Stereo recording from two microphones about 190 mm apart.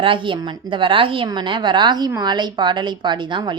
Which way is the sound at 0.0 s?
25° right (ahead or behind).